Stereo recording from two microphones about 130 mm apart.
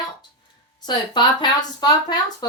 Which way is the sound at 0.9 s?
35° left (ahead or behind).